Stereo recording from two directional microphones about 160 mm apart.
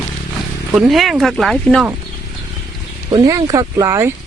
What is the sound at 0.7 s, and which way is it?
Speech, centre (ahead or behind).